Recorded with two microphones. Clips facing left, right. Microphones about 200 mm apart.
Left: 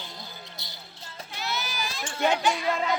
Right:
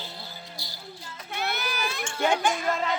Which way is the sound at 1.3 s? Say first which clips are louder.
Right 3 dB; 55° right (ahead or behind).